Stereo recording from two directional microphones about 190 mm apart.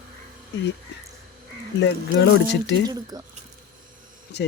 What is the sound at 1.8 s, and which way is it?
Speech, 60° left (ahead or behind).